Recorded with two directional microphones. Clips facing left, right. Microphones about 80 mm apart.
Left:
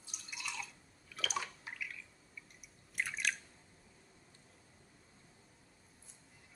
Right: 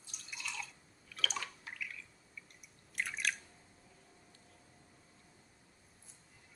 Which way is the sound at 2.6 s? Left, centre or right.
Centre.